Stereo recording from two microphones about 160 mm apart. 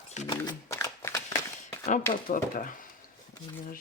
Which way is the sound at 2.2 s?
55° left (ahead or behind).